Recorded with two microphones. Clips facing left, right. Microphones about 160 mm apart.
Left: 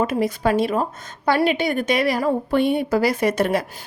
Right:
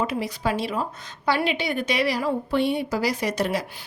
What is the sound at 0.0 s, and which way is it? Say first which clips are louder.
A woman's voice: left 5 dB; 50° left (ahead or behind).